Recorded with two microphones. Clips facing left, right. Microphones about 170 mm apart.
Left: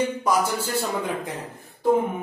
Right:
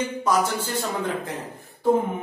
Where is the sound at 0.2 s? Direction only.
10° left (ahead or behind).